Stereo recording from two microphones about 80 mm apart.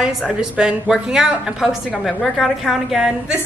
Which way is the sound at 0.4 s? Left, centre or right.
Centre.